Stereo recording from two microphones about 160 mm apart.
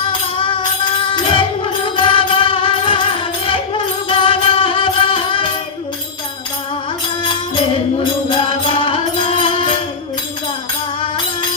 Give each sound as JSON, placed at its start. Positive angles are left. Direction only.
{"t": 0.4, "sound": "music", "side_deg": 30}
{"t": 8.4, "sound": "music", "side_deg": 35}